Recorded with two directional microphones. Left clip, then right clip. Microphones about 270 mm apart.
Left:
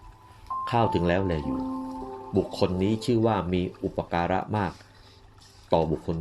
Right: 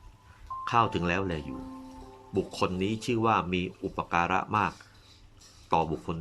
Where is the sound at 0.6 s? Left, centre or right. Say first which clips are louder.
Left 1 dB; centre.